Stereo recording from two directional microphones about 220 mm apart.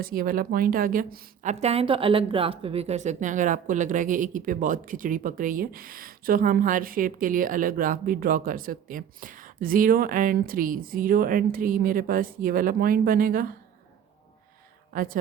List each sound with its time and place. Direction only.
0.0 s a woman's voice: 40° right (ahead or behind)
14.9 s a woman's voice: 40° right (ahead or behind)